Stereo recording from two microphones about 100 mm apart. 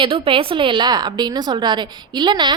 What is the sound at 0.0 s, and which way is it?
A woman's voice, 65° right (ahead or behind).